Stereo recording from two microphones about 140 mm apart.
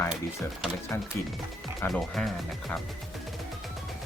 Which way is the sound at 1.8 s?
5° left (ahead or behind).